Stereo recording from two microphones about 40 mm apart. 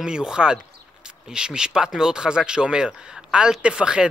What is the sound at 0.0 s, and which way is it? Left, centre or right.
Speech, centre.